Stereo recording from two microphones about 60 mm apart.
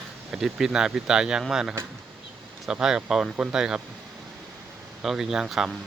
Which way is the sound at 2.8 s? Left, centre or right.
Centre.